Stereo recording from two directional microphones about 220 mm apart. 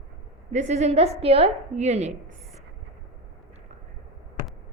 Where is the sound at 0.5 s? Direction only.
30° right (ahead or behind).